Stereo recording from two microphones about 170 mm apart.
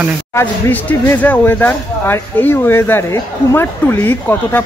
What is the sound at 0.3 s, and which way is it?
Speech, 15° left (ahead or behind).